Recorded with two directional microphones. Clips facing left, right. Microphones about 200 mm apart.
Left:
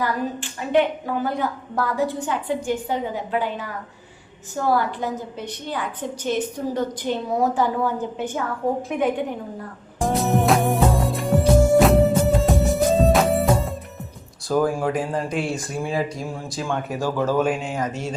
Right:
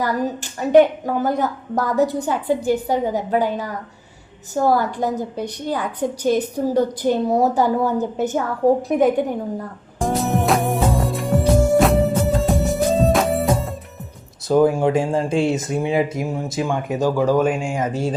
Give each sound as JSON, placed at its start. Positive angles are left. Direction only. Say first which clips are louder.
{"t": 0.0, "sound": "a woman's voice", "louder": "right 3 dB", "side_deg": -40}
{"t": 10.0, "sound": "music", "louder": "even", "side_deg": 0}
{"t": 14.4, "sound": "speech", "louder": "right 5 dB", "side_deg": -20}
{"t": 17.8, "sound": "a woman's voice", "louder": "right 6 dB", "side_deg": -30}